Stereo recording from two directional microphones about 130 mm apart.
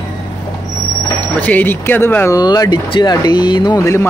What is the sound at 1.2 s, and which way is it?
Speech, 10° left (ahead or behind).